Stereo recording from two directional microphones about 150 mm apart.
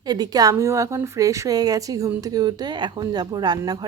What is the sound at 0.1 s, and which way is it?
A woman's voice, 25° right (ahead or behind).